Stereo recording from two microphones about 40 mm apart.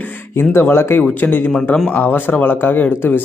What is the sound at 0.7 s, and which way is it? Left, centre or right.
Speech, left.